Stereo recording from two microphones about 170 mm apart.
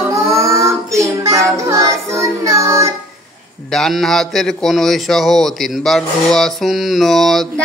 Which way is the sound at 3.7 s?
Centre (ahead or behind).